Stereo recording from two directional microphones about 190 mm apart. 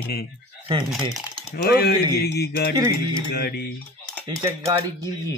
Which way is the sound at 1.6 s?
55° left (ahead or behind).